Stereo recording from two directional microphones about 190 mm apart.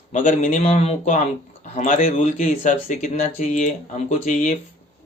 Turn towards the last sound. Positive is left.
turn(degrees=45)  # may be behind; listen again after turning